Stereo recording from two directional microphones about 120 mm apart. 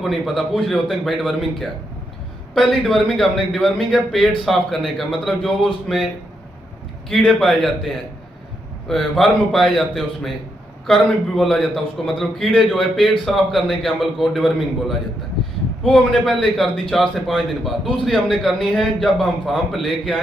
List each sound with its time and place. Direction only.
0.0 s a man's voice: centre (ahead or behind)
2.5 s a man's voice: centre (ahead or behind)
7.1 s a man's voice: centre (ahead or behind)